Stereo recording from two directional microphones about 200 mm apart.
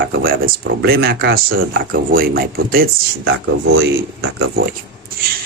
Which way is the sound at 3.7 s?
85° right.